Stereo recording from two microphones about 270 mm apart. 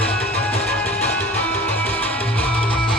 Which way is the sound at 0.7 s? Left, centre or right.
Centre.